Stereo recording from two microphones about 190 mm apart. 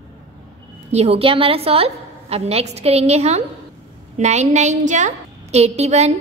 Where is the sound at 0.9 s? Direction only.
30° right (ahead or behind).